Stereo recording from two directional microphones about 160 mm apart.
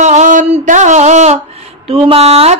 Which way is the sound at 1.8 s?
35° right (ahead or behind).